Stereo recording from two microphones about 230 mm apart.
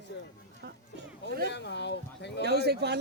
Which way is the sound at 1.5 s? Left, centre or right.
Left.